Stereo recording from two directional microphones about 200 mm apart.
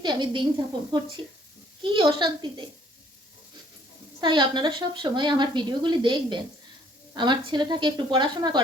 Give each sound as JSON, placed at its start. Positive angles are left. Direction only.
{"t": 0.0, "sound": "speech", "side_deg": -20}
{"t": 1.8, "sound": "a woman's voice", "side_deg": -25}
{"t": 4.2, "sound": "a woman's voice", "side_deg": -25}